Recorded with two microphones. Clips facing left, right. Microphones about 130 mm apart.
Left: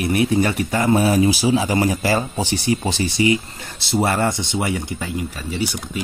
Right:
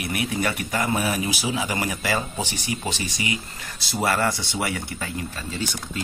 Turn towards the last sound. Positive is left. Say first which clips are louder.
# left 5 dB
turn(degrees=10)  # may be behind; listen again after turning